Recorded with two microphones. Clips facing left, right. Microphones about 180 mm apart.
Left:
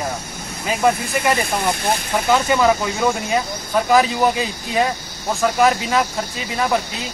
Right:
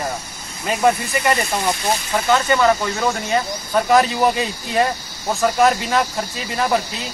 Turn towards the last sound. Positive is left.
turn(degrees=0)  # may be behind; listen again after turning